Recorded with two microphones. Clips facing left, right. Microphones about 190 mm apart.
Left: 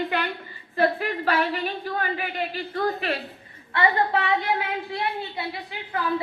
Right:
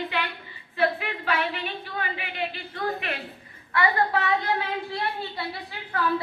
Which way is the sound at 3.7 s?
20° left (ahead or behind).